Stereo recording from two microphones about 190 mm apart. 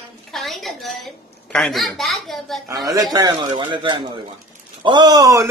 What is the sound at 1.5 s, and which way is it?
A woman's voice, centre (ahead or behind).